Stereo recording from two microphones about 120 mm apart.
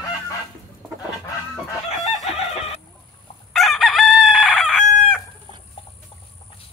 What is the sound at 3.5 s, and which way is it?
Chicken, centre (ahead or behind).